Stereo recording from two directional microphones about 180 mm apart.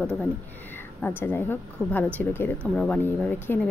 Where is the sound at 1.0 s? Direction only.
10° left (ahead or behind).